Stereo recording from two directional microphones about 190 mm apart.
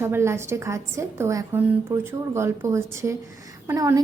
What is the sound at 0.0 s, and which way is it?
A woman's voice, 15° right (ahead or behind).